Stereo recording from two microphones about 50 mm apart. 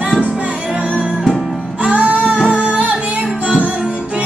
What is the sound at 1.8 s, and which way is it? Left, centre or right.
Music, right.